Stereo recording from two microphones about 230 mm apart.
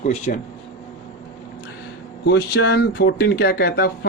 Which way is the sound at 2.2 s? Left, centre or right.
Left.